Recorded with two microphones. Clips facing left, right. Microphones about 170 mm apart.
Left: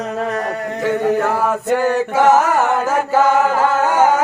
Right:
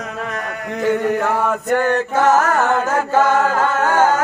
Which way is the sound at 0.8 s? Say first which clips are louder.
Left 1 dB; centre (ahead or behind).